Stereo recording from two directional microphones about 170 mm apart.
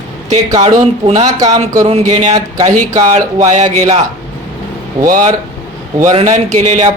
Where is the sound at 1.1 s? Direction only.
25° right (ahead or behind).